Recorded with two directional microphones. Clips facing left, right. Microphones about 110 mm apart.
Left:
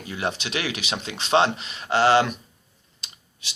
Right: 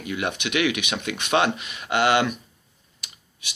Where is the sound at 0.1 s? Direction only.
35° left (ahead or behind).